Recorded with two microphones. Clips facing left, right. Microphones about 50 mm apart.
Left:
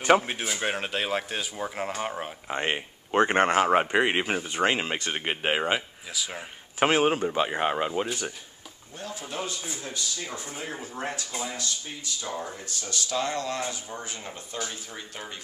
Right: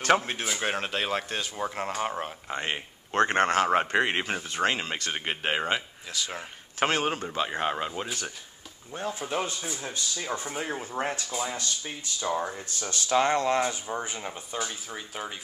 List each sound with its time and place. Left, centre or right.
0.0 s speech: centre
2.5 s speech: centre
6.9 s speech: centre
8.9 s speech: right
9.7 s speech: centre
10.3 s speech: right; by 15.3 s centre